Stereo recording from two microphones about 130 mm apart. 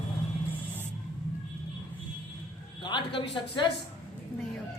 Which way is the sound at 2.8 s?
40° left (ahead or behind).